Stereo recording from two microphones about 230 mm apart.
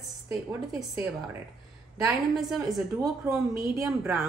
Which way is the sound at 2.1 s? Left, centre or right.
Centre.